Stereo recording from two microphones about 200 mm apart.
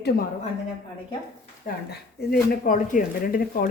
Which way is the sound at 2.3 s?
45° left (ahead or behind).